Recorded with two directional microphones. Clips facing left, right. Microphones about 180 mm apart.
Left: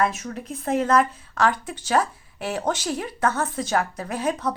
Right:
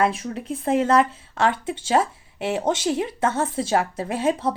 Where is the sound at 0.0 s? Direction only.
30° right (ahead or behind).